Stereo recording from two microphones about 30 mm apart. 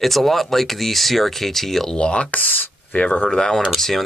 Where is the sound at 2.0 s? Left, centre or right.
Left.